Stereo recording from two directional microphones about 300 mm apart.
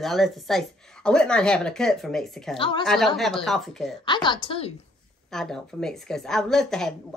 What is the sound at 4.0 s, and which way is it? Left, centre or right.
Speech, centre.